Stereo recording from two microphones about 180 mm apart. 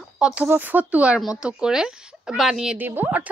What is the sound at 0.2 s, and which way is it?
A woman's voice, 5° right (ahead or behind).